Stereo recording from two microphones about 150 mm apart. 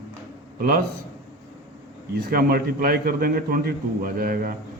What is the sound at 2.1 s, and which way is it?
A man's voice, 85° right.